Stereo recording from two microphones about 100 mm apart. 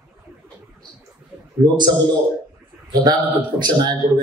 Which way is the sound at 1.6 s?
50° right (ahead or behind).